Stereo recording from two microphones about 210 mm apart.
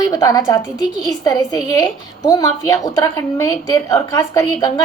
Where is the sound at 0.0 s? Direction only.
15° left (ahead or behind).